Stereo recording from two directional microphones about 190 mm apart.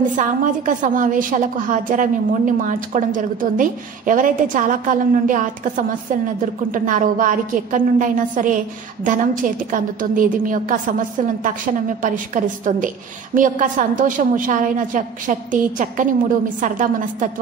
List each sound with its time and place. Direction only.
0.1 s a woman's voice: 45° right (ahead or behind)